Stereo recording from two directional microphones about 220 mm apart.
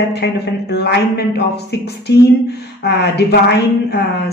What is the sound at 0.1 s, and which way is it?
A woman's voice, 50° left (ahead or behind).